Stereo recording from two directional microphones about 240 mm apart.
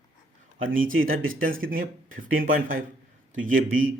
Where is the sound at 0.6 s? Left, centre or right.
Right.